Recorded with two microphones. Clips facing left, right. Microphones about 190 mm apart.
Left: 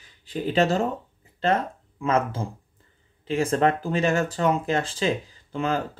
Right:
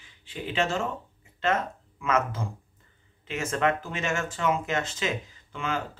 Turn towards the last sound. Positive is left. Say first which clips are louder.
# left 6 dB
turn(degrees=35)  # may be behind; listen again after turning